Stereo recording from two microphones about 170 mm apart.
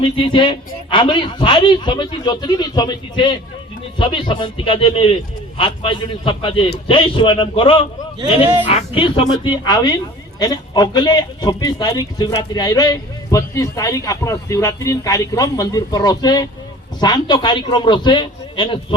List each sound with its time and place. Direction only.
0.2 s a man's voice: 30° left (ahead or behind)